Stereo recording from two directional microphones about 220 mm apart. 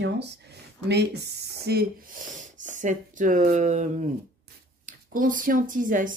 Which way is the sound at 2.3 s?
35° right (ahead or behind).